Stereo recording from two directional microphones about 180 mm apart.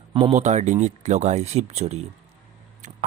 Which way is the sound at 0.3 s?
40° right (ahead or behind).